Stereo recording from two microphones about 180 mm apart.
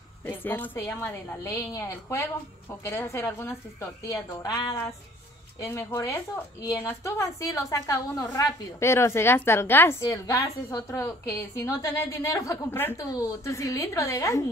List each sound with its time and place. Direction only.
0.3 s a woman's voice: 10° left (ahead or behind)